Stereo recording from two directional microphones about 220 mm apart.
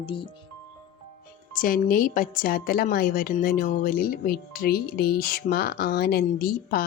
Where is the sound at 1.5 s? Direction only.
40° left (ahead or behind).